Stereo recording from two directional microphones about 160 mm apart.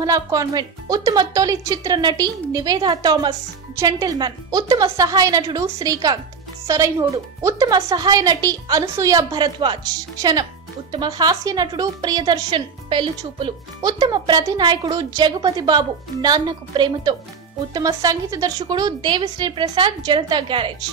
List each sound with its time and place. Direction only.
0.0 s speech: 20° right (ahead or behind)